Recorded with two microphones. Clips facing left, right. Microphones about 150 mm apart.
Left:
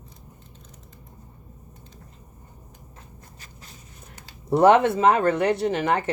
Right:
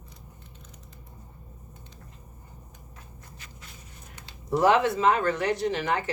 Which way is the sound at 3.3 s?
35° left (ahead or behind).